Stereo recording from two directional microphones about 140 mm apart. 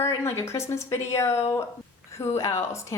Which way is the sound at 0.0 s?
20° left (ahead or behind).